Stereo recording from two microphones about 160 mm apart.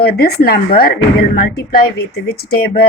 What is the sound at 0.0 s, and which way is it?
Speech, 75° left (ahead or behind).